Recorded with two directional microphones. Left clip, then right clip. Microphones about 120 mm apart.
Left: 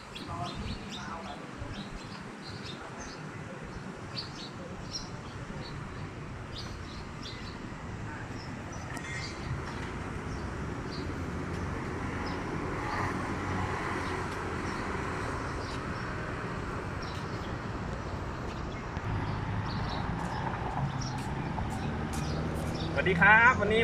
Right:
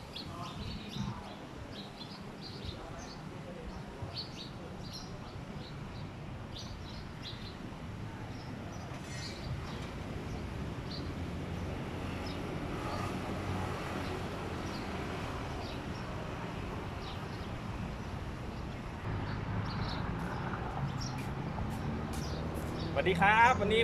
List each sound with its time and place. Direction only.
23.0 s speech: 35° right (ahead or behind)